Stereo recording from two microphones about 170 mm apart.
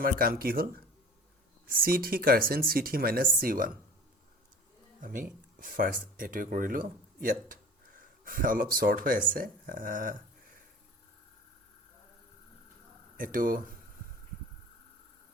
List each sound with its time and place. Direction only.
0.0 s speech: 60° right (ahead or behind)
4.9 s speech: 50° right (ahead or behind)
13.1 s speech: 55° right (ahead or behind)